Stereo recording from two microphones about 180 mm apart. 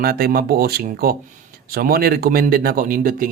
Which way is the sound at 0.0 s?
60° right (ahead or behind).